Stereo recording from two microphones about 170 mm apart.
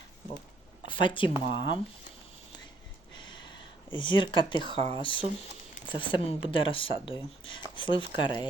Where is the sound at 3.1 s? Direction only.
25° left (ahead or behind).